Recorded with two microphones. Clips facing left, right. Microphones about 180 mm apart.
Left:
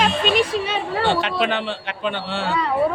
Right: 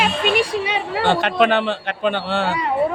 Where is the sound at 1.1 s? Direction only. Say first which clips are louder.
Right 6 dB; 55° right (ahead or behind).